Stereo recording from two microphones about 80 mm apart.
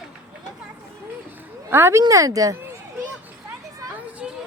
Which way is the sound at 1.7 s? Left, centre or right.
Right.